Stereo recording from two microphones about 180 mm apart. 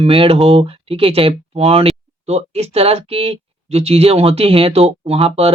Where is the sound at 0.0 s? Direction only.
30° right (ahead or behind).